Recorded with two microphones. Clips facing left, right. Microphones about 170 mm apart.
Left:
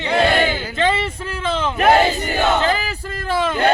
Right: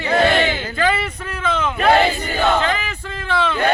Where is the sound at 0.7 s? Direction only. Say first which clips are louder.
Left 1 dB; 25° left (ahead or behind).